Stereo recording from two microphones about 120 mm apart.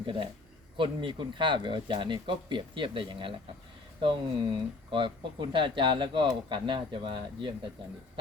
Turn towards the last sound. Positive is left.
turn(degrees=-40)  # may be behind; listen again after turning